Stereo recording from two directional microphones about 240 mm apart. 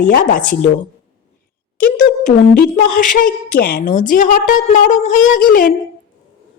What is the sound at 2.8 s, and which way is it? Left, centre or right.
A woman's voice, left.